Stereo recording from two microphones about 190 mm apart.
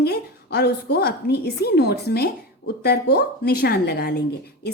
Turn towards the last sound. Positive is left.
turn(degrees=55)  # may be behind; listen again after turning